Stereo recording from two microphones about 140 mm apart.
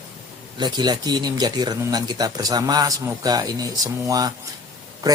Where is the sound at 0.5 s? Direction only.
30° right (ahead or behind).